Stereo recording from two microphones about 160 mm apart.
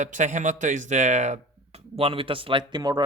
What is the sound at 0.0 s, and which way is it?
Speech, 50° right (ahead or behind).